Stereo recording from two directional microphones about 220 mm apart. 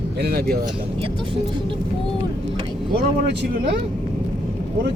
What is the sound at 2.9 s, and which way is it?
Speech, 50° right (ahead or behind).